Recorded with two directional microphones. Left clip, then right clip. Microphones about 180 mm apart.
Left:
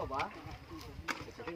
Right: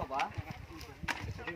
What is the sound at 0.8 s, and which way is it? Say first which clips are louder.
Speech: right 2 dB; 30° right (ahead or behind).